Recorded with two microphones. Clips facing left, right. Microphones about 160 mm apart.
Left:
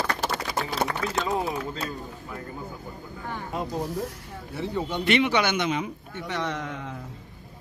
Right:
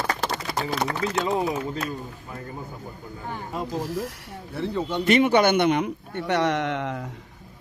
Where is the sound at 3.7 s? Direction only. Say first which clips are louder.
Right 2 dB; 90° right.